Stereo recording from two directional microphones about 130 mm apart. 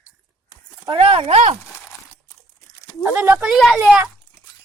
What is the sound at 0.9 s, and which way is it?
Speech, 45° right (ahead or behind).